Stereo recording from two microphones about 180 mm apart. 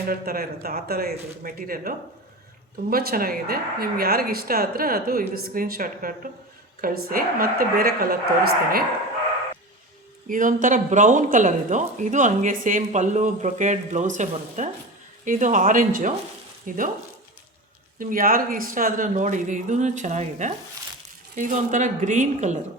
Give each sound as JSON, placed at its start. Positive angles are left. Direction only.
{"t": 0.1, "sound": "speech", "side_deg": -55}
{"t": 10.2, "sound": "speech", "side_deg": -50}
{"t": 18.0, "sound": "speech", "side_deg": -50}